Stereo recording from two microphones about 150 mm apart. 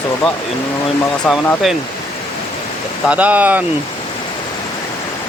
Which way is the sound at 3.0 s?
10° right (ahead or behind).